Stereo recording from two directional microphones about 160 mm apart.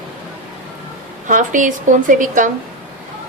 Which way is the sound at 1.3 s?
55° right (ahead or behind).